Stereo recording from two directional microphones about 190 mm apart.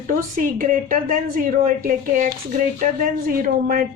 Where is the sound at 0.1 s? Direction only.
45° right (ahead or behind).